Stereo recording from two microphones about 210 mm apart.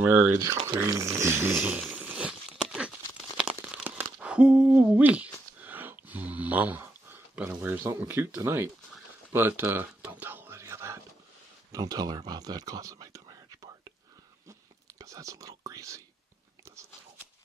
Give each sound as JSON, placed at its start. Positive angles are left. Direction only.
{"t": 0.0, "sound": "speech", "side_deg": -10}
{"t": 1.5, "sound": "a sound", "side_deg": -5}
{"t": 9.3, "sound": "whispering", "side_deg": -10}
{"t": 11.7, "sound": "speech", "side_deg": -20}
{"t": 15.0, "sound": "whispering", "side_deg": -15}